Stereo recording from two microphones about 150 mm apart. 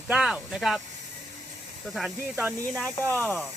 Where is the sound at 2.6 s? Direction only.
10° left (ahead or behind).